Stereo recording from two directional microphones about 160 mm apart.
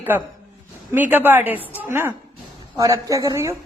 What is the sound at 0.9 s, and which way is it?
A man's voice, 10° right (ahead or behind).